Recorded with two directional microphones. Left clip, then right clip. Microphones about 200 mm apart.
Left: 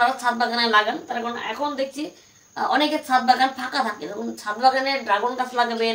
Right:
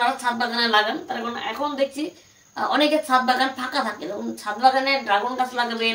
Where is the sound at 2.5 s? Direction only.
15° left (ahead or behind).